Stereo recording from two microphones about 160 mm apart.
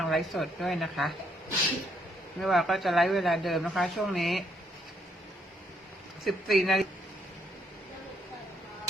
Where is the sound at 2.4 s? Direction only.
Centre (ahead or behind).